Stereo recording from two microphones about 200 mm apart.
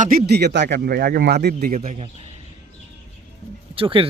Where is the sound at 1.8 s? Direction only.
35° right (ahead or behind).